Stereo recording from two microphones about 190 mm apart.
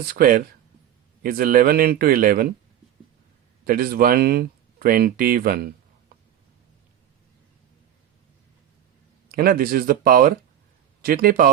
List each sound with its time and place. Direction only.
0.1 s speech: 50° right (ahead or behind)
3.6 s speech: 50° right (ahead or behind)
9.3 s speech: 50° right (ahead or behind)